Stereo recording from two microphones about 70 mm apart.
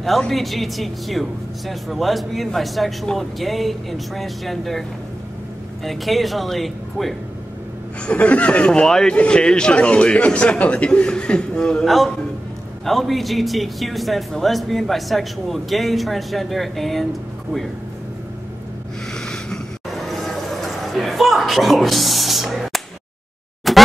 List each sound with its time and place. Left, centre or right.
0.3 s a man's voice: centre
5.9 s a man's voice: centre
8.0 s a man's voice: centre
19.1 s vehicle: centre
23.7 s scratch: centre